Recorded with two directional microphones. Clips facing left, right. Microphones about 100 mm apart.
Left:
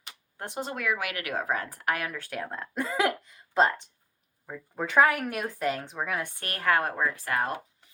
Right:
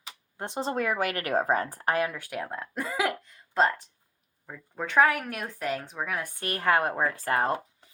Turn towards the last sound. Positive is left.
turn(degrees=-30)  # may be behind; listen again after turning